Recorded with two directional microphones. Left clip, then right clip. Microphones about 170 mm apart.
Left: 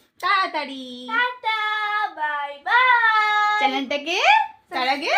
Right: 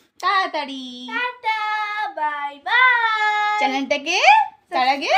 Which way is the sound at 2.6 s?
20° right (ahead or behind).